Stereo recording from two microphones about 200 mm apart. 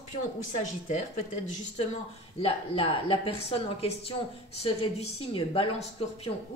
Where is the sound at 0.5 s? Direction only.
35° left (ahead or behind).